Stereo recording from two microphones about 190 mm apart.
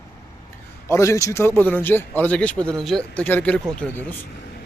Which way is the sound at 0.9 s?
15° left (ahead or behind).